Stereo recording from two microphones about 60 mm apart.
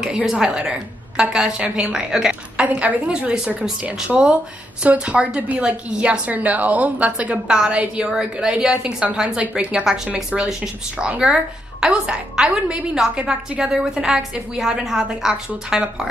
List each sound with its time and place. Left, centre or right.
0.0 s a woman's voice: centre
2.6 s a woman's voice: right